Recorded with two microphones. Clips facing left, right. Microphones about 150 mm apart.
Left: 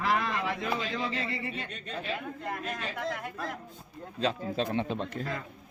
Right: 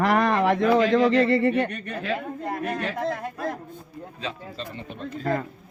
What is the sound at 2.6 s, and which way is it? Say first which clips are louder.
Speech: right 8 dB; 65° right (ahead or behind).